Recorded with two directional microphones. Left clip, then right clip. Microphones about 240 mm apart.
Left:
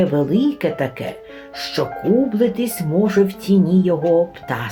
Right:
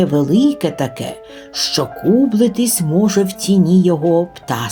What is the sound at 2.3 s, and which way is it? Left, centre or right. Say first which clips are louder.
Speech: right 3 dB; right.